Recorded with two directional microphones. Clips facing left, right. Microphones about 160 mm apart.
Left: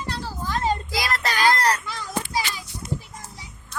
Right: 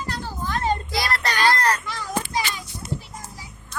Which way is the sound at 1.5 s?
15° left (ahead or behind).